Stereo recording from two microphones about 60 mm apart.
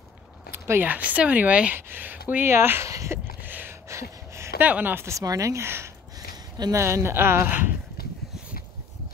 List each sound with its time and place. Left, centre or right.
0.5 s speech: right
2.9 s speech: right
3.4 s a sound: right
4.6 s speech: right
4.9 s a woman's voice: right
5.2 s speech: right
6.7 s a woman's voice: right
7.4 s speech: right